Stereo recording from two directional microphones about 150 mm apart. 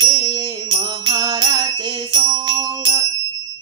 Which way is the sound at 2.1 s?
35° right (ahead or behind).